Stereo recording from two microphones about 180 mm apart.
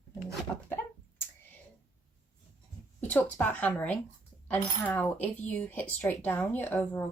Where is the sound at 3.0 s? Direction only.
10° left (ahead or behind).